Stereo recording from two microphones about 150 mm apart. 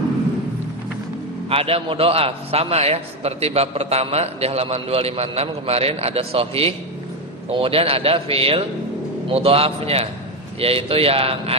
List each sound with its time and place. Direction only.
1.5 s a man's voice: 40° right (ahead or behind)